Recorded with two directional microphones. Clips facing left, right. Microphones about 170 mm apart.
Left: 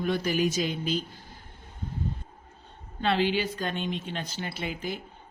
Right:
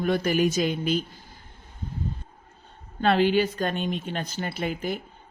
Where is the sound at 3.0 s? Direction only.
50° right (ahead or behind).